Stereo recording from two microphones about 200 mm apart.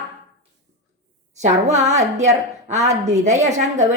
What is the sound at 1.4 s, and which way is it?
A woman's voice, 35° right (ahead or behind).